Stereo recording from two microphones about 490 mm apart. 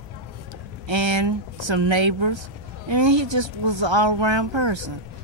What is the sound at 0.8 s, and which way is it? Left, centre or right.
Speech, right.